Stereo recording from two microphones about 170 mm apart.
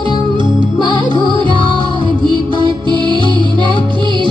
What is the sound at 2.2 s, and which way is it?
Music, 30° right (ahead or behind).